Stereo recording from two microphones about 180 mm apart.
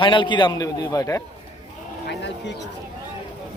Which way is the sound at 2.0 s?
70° left (ahead or behind).